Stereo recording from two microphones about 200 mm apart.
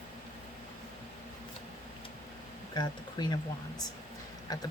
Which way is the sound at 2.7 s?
20° left (ahead or behind).